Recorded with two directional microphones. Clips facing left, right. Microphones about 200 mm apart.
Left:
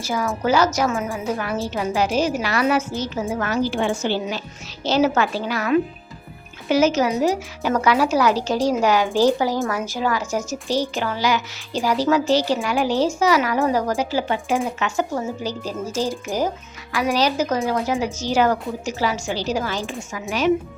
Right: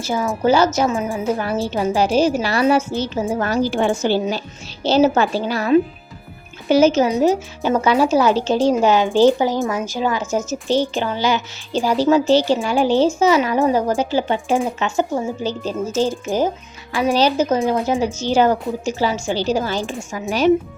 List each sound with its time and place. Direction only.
0.0 s a woman's voice: 30° right (ahead or behind)
1.1 s a woman's voice: 30° right (ahead or behind)
16.3 s speech: centre (ahead or behind)
16.9 s a woman's voice: 30° right (ahead or behind)